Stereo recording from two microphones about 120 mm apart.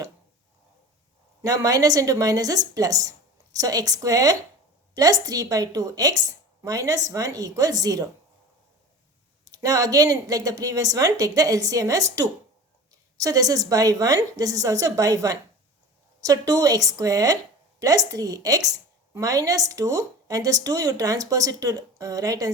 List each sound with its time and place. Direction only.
1.5 s a woman's voice: 30° right (ahead or behind)
9.4 s speech: 30° right (ahead or behind)